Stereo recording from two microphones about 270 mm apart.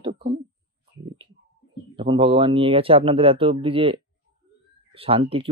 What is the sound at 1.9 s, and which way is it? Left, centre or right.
Speech, centre.